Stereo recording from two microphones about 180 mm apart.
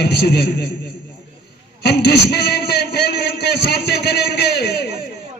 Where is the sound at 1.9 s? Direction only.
65° left (ahead or behind).